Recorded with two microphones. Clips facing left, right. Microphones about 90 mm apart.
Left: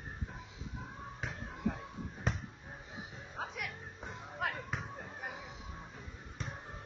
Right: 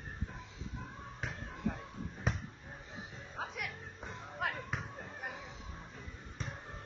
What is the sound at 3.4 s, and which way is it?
Music, centre (ahead or behind).